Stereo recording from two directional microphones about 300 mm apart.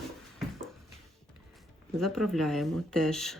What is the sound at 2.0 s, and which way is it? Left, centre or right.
Speech, centre.